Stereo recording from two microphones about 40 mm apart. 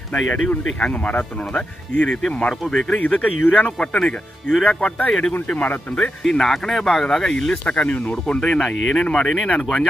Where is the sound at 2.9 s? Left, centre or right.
Left.